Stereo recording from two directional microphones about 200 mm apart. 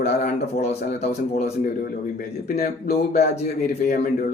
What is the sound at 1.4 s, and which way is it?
Speech, 50° left (ahead or behind).